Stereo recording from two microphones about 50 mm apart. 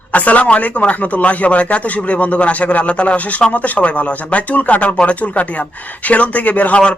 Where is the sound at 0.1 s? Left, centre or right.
Left.